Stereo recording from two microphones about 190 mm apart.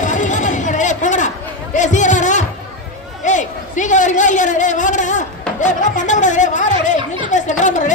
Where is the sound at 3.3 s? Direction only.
40° left (ahead or behind).